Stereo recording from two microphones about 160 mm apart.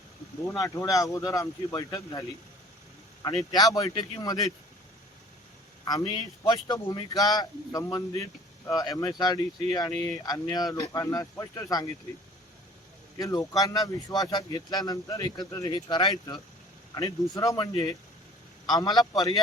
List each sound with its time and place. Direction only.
0.4 s a man's voice: 20° left (ahead or behind)
3.5 s a man's voice: 20° left (ahead or behind)
6.4 s a man's voice: 25° left (ahead or behind)
13.1 s a man's voice: 20° left (ahead or behind)